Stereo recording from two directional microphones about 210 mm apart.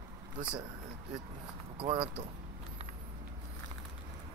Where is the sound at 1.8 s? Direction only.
25° right (ahead or behind).